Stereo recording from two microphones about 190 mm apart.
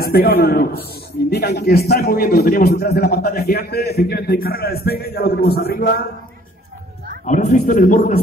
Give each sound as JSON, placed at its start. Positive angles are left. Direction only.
{"t": 0.0, "sound": "a man's voice", "side_deg": 55}
{"t": 7.2, "sound": "a man's voice", "side_deg": 40}